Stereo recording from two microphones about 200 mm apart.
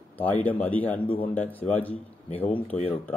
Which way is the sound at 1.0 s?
25° left (ahead or behind).